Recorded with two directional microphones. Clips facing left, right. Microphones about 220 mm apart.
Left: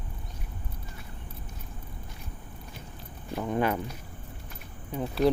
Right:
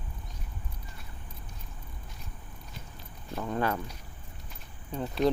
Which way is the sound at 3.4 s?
15° left (ahead or behind).